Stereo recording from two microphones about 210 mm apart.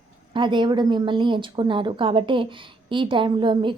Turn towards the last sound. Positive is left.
turn(degrees=-20)  # may be behind; listen again after turning